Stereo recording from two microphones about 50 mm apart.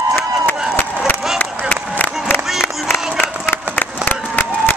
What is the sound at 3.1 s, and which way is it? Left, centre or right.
Crowd, left.